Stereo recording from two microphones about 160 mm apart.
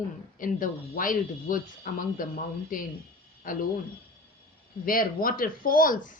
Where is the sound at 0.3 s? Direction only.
60° left (ahead or behind).